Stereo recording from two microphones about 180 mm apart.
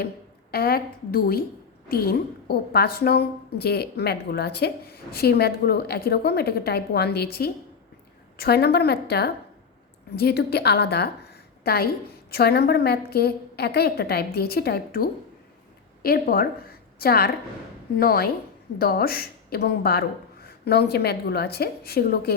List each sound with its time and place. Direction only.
0.5 s a woman's voice: 60° left (ahead or behind)